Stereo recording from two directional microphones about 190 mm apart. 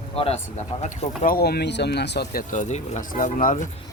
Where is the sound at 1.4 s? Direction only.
60° left (ahead or behind); by 3.7 s 40° left (ahead or behind).